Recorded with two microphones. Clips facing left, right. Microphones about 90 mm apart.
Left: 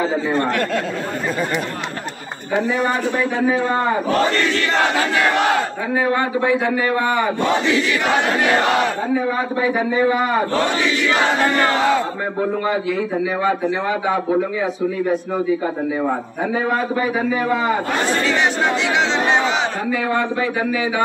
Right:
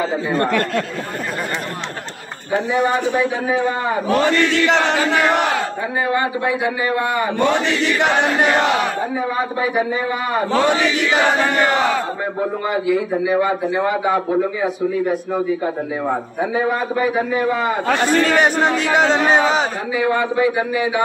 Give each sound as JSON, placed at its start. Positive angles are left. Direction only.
{"t": 2.7, "sound": "a man's voice", "side_deg": 0}
{"t": 3.2, "sound": "speech", "side_deg": -15}
{"t": 5.9, "sound": "speech", "side_deg": -10}
{"t": 9.1, "sound": "speech", "side_deg": -10}
{"t": 12.4, "sound": "a man's voice", "side_deg": -5}
{"t": 18.2, "sound": "speech", "side_deg": -45}
{"t": 19.9, "sound": "speech", "side_deg": -5}